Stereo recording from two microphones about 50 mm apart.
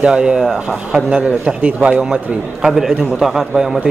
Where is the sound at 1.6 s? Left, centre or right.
Right.